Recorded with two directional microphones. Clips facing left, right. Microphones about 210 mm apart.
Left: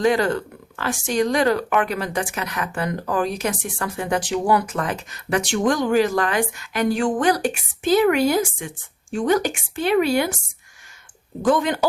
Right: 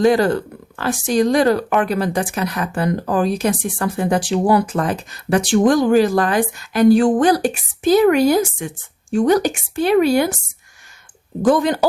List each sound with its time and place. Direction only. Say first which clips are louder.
0.0 s speech: right 5 dB; 35° right (ahead or behind)
11.4 s speech: right 4 dB; 40° right (ahead or behind)